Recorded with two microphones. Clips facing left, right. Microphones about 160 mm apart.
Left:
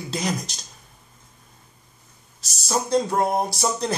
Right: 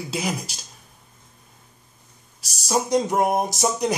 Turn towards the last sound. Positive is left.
turn(degrees=-15)  # may be behind; listen again after turning